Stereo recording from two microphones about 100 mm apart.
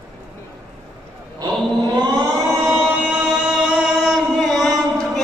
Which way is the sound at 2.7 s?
10° right (ahead or behind).